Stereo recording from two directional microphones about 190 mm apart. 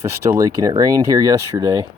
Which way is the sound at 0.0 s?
15° right (ahead or behind).